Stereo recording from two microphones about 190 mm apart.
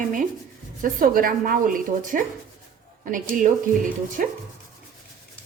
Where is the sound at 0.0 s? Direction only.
45° right (ahead or behind).